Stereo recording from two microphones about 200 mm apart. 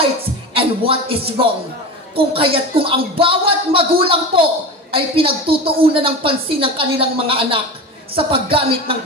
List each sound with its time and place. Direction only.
0.6 s a woman's voice: 30° right (ahead or behind)